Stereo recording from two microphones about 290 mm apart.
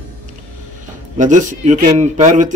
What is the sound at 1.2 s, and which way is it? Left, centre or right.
Speech, right.